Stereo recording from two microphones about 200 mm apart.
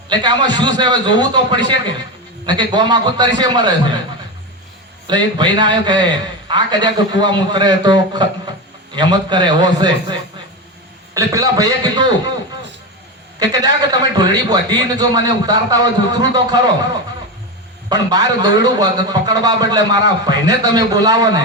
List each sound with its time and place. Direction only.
0.1 s a man's voice: 20° right (ahead or behind)
5.0 s a man's voice: 20° right (ahead or behind)
13.4 s a man's voice: 20° right (ahead or behind)
17.8 s a man's voice: 20° right (ahead or behind)